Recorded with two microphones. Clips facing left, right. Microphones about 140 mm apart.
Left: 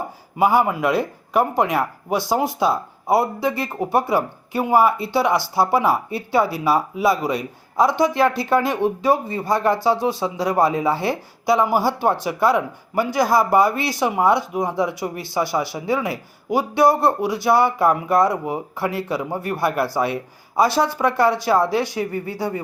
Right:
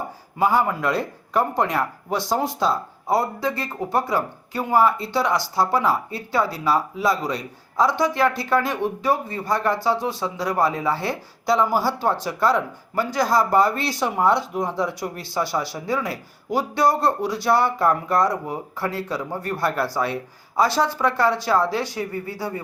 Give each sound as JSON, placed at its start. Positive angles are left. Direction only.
{"t": 0.3, "sound": "speech", "side_deg": 15}